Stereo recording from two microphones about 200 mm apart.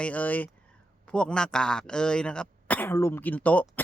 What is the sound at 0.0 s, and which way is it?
A man's voice, 5° left (ahead or behind).